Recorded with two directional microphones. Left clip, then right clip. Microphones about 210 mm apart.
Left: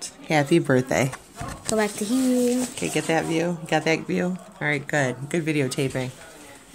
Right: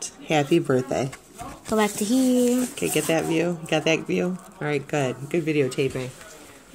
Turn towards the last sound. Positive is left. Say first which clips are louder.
# right 2 dB
turn(degrees=30)  # may be behind; listen again after turning